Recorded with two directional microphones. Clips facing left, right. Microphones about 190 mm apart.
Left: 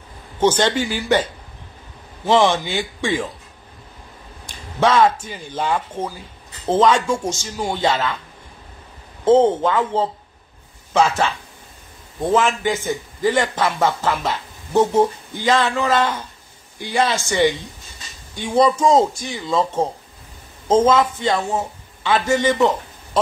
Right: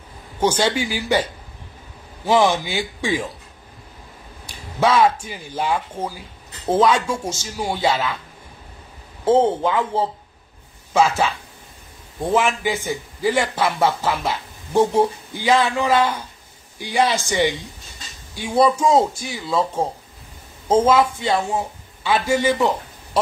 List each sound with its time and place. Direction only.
0.4 s speech: 10° right (ahead or behind)
2.2 s speech: 10° right (ahead or behind)
4.5 s speech: 5° right (ahead or behind)
9.2 s speech: 10° right (ahead or behind)
12.4 s speech: 10° right (ahead or behind)